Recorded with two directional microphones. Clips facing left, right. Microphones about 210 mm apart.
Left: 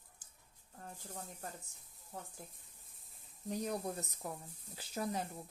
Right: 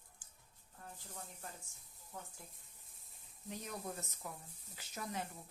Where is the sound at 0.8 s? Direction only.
40° left (ahead or behind).